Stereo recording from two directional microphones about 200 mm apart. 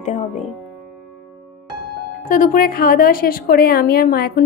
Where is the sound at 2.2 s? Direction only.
45° left (ahead or behind).